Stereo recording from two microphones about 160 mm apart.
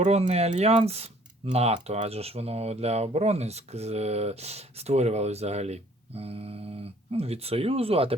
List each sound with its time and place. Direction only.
0.0 s speech: 40° right (ahead or behind)